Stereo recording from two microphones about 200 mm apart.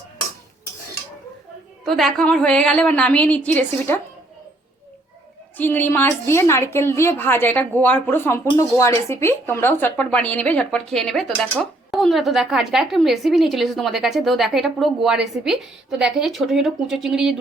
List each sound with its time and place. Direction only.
1.8 s speech: centre (ahead or behind)
5.5 s speech: 10° left (ahead or behind)